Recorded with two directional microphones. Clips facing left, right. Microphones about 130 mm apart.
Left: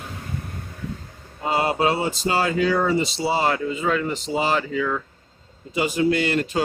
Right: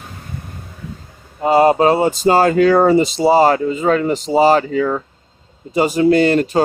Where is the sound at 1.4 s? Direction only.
40° right (ahead or behind).